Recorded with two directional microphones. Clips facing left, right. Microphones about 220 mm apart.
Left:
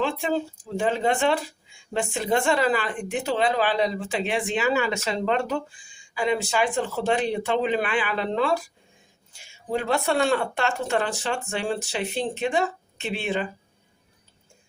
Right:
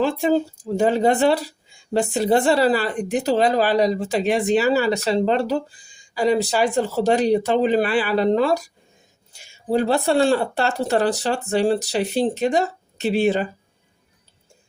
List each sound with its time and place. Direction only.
0.0 s a woman's voice: 40° right (ahead or behind)